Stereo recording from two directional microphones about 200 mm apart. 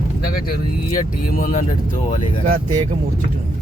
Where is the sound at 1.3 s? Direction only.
45° left (ahead or behind).